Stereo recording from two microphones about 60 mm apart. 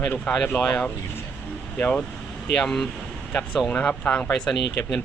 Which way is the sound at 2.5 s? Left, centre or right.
Centre.